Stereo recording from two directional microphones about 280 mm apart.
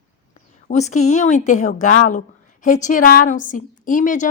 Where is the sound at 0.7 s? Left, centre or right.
Left.